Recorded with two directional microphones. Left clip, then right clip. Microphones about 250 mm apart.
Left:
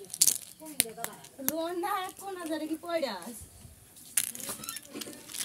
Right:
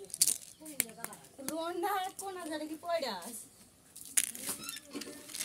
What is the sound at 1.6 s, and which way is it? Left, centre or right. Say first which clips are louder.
A child's voice: left 2 dB; right.